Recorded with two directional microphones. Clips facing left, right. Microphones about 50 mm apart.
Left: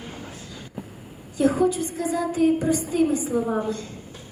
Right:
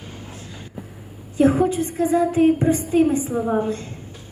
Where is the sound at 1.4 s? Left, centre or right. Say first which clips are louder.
Right 3 dB; right.